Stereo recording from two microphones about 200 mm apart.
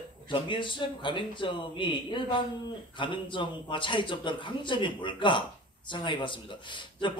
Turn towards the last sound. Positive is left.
turn(degrees=25)  # may be behind; listen again after turning